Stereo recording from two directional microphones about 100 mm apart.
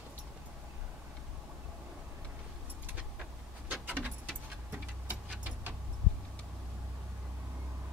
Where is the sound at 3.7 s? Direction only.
10° right (ahead or behind).